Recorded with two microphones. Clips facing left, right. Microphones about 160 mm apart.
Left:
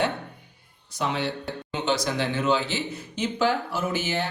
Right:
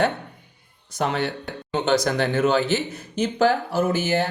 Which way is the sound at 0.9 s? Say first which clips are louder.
Right 3 dB; 50° right (ahead or behind).